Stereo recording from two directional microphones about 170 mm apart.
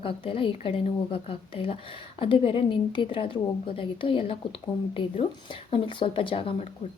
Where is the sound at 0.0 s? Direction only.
30° left (ahead or behind).